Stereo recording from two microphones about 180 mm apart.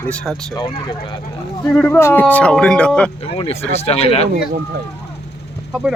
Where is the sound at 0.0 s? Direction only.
5° left (ahead or behind).